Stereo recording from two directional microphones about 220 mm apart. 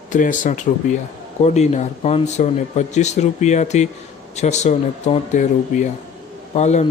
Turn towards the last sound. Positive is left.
turn(degrees=30)  # may be behind; listen again after turning